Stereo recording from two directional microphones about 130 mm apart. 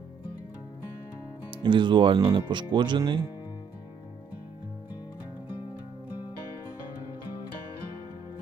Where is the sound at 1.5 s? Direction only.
40° right (ahead or behind).